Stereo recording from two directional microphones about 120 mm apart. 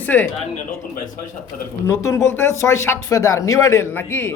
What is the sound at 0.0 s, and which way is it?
Speech, 15° left (ahead or behind).